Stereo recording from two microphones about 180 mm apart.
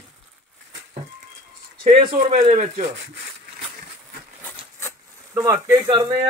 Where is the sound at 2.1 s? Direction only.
40° right (ahead or behind).